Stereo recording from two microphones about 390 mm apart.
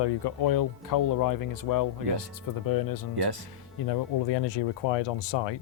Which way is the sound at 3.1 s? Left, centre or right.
Right.